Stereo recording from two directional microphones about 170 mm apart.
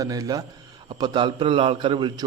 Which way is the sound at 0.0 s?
20° right (ahead or behind).